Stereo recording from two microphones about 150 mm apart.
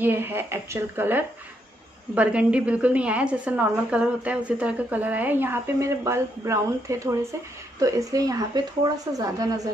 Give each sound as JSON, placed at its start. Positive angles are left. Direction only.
{"t": 0.0, "sound": "a woman's voice", "side_deg": -15}